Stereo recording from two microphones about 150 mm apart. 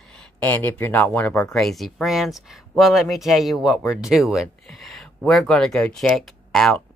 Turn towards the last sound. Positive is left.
turn(degrees=0)  # may be behind; listen again after turning